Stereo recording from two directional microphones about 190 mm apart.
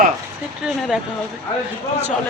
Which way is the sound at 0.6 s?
Centre (ahead or behind).